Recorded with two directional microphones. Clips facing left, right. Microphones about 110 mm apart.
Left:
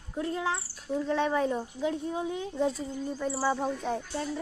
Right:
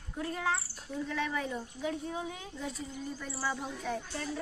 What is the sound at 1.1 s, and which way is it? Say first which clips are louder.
A woman's voice: left 8 dB; 30° left (ahead or behind).